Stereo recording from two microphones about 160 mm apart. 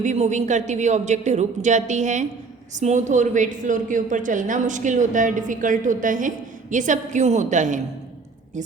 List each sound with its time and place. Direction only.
0.0 s a woman's voice: 50° right (ahead or behind)